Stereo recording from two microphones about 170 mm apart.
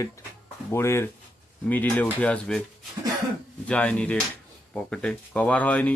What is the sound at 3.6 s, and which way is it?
Speech, 5° left (ahead or behind).